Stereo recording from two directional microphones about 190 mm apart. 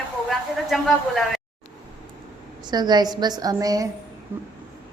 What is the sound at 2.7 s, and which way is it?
A woman's voice, 20° right (ahead or behind).